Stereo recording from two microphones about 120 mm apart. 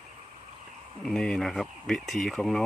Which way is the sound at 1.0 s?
5° left (ahead or behind).